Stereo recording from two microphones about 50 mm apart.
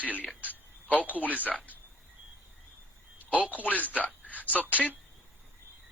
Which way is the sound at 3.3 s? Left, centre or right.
Right.